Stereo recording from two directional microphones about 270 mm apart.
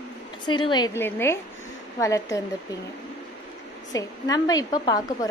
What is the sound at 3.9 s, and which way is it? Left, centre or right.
A woman's voice, centre.